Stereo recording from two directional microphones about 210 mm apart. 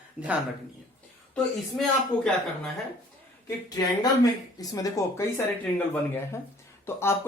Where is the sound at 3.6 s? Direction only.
15° left (ahead or behind).